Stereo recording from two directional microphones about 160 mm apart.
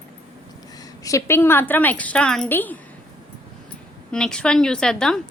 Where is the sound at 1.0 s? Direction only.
15° left (ahead or behind).